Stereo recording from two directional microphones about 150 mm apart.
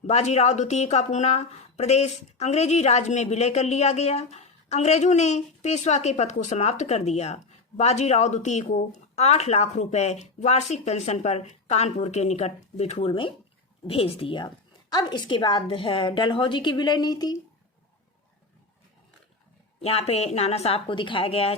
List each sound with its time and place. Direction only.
0.1 s a woman's voice: 50° left (ahead or behind); by 17.3 s 25° left (ahead or behind)
19.8 s speech: 40° left (ahead or behind)